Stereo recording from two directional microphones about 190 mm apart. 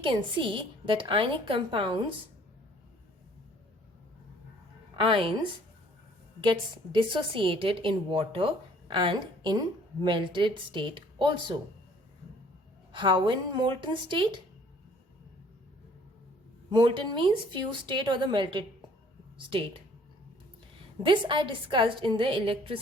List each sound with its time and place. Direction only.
0.0 s a woman's voice: 25° right (ahead or behind)
4.9 s a woman's voice: 25° right (ahead or behind)
6.4 s a woman's voice: 25° right (ahead or behind)
12.9 s a woman's voice: 25° right (ahead or behind)
16.6 s a woman's voice: 25° right (ahead or behind)
21.0 s a woman's voice: 25° right (ahead or behind)